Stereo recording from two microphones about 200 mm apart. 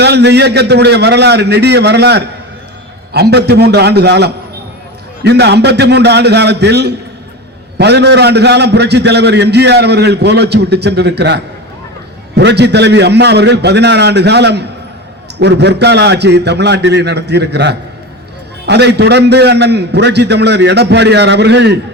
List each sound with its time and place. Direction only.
0.0 s a man's voice: 55° right (ahead or behind)